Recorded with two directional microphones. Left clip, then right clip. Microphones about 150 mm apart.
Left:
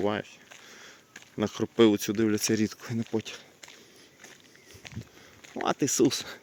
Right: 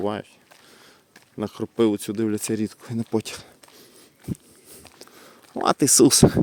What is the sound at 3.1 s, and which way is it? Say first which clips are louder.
Speech: right 8 dB; 55° right (ahead or behind).